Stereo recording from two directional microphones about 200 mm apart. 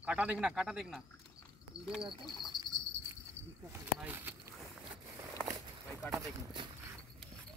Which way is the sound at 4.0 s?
10° right (ahead or behind).